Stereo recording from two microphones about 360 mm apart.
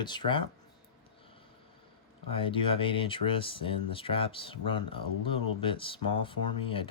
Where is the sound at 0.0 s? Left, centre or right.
Centre.